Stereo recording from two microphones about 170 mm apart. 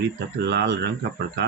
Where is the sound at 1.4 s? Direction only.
90° right.